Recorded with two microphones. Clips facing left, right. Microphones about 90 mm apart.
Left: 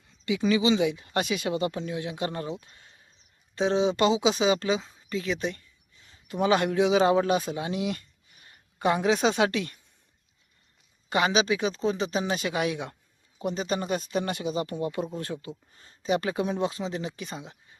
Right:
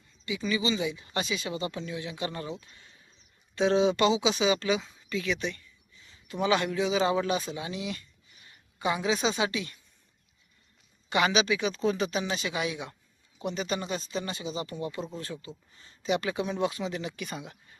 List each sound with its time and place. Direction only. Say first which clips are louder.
0.3 s speech: left 6 dB; 65° left (ahead or behind)
0.9 s speech: left 4 dB; 50° left (ahead or behind)
3.5 s speech: even; 25° left (ahead or behind)
3.9 s speech: left 2 dB; 45° left (ahead or behind); by 9.7 s 60° left (ahead or behind)
11.1 s speech: left 1 dB; 40° left (ahead or behind)
12.2 s speech: left 4 dB; 50° left (ahead or behind)
13.4 s speech: left 3 dB; 40° left (ahead or behind)